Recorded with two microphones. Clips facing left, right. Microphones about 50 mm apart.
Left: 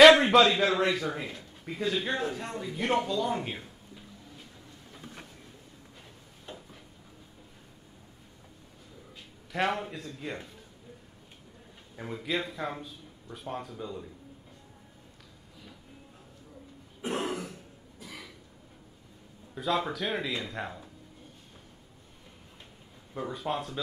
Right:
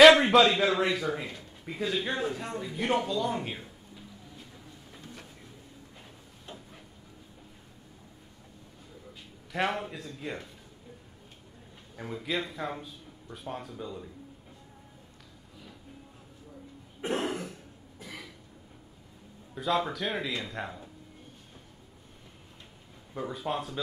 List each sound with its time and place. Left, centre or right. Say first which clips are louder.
0.0 s a man's voice: even; centre
9.5 s a man's voice: left 1 dB; centre
12.0 s a man's voice: even; centre
17.2 s throat clearing: right 1 dB; right
17.9 s a sound: right 1 dB; right
19.5 s a man's voice: right 1 dB; centre
23.1 s a man's voice: even; centre